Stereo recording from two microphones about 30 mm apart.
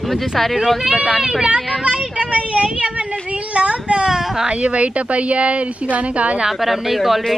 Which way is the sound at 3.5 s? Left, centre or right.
Right.